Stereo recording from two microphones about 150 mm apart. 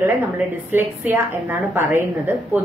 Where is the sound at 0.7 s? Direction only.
15° right (ahead or behind).